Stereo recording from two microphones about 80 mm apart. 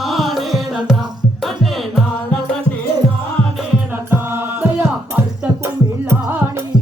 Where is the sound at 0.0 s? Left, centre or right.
Centre.